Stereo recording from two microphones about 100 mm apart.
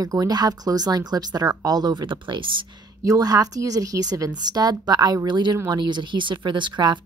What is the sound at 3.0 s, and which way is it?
Speech, 35° right (ahead or behind).